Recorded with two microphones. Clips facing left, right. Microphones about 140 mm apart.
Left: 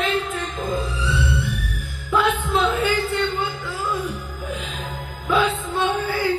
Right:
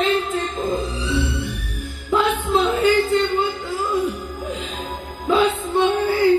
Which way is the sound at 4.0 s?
25° right (ahead or behind).